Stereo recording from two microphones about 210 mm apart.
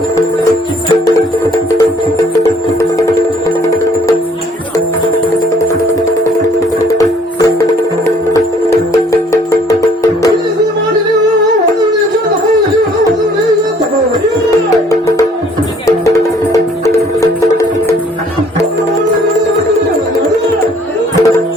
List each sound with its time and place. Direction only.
1.8 s music: 15° left (ahead or behind)
6.8 s music: 15° left (ahead or behind)
14.7 s music: 15° left (ahead or behind)